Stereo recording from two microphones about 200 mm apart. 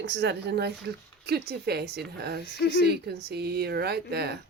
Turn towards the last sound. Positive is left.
turn(degrees=-55)  # may be behind; listen again after turning